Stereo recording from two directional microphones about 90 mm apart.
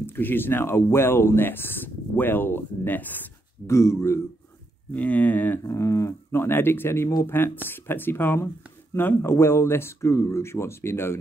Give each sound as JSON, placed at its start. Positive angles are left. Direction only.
{"t": 0.0, "sound": "speech", "side_deg": 25}
{"t": 4.9, "sound": "speech", "side_deg": 15}
{"t": 5.6, "sound": "speech", "side_deg": 35}